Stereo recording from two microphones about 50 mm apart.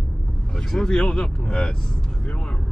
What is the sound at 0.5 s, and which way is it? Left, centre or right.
Speech, centre.